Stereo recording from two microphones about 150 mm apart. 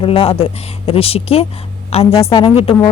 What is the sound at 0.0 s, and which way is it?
A woman's voice, 35° left (ahead or behind).